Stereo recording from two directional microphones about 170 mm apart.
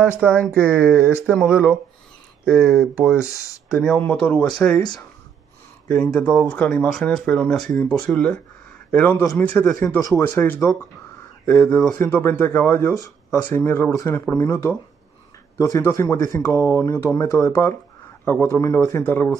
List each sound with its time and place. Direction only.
0.2 s speech: 10° right (ahead or behind)
3.2 s speech: 20° left (ahead or behind)
3.6 s speech: centre (ahead or behind)
5.9 s speech: 5° left (ahead or behind)